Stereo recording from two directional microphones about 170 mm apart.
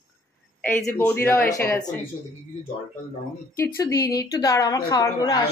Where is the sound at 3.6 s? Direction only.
20° left (ahead or behind).